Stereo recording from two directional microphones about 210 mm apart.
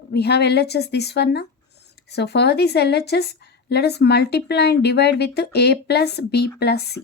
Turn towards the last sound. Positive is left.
turn(degrees=50)  # may be behind; listen again after turning